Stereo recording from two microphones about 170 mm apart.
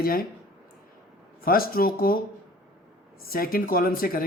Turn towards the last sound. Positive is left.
turn(degrees=60)  # may be behind; listen again after turning